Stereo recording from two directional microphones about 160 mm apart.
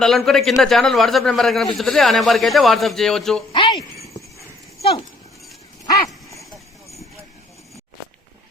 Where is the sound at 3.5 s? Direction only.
30° left (ahead or behind).